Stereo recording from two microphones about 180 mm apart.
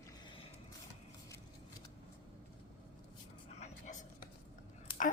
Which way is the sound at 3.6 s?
40° left (ahead or behind).